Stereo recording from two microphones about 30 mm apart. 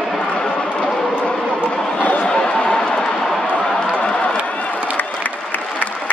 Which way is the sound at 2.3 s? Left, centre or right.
Left.